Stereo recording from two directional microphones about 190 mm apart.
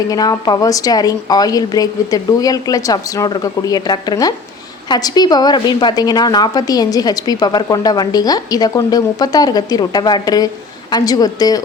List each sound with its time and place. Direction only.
0.1 s a woman's voice: 20° left (ahead or behind)